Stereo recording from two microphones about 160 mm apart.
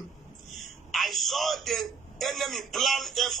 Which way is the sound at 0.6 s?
Centre (ahead or behind).